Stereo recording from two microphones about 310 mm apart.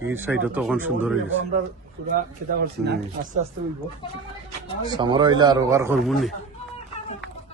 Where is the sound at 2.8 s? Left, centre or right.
Right.